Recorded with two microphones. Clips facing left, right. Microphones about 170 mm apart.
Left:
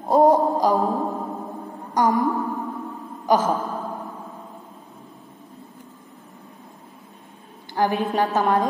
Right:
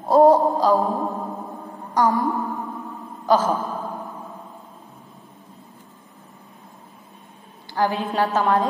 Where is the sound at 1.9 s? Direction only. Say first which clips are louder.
Even; 15° left (ahead or behind).